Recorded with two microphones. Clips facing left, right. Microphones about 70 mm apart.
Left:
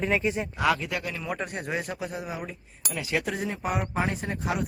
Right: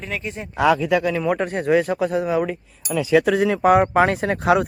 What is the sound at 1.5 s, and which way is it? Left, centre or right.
Speech, right.